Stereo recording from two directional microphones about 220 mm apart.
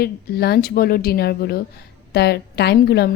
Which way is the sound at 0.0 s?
45° left (ahead or behind).